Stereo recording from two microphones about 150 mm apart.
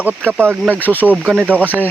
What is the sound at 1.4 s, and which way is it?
Speech, 10° right (ahead or behind).